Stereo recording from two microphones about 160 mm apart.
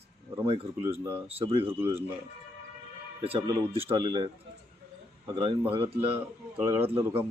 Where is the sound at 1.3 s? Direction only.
40° right (ahead or behind).